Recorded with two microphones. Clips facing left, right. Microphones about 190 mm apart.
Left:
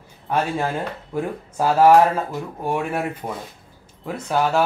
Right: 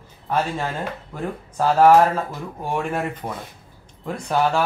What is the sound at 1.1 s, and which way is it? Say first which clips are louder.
Speech: left 6 dB; 10° left (ahead or behind).